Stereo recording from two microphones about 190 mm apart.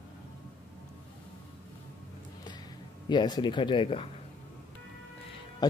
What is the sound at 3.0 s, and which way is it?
Speech, 20° left (ahead or behind).